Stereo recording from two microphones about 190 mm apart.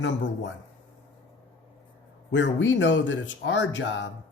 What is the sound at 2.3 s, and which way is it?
Speech, 70° left (ahead or behind).